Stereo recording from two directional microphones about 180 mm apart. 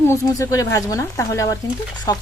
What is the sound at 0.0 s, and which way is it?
Speech, 15° left (ahead or behind).